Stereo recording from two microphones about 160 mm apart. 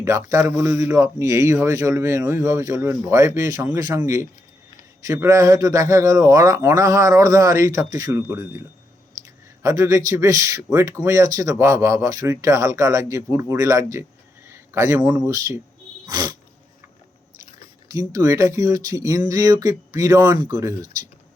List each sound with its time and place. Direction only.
0.0 s speech: 20° right (ahead or behind)
9.6 s speech: 20° right (ahead or behind)
14.4 s a sound: 15° right (ahead or behind)
15.3 s speech: 20° right (ahead or behind)
16.0 s a sound: 25° right (ahead or behind)
17.8 s speech: 20° right (ahead or behind)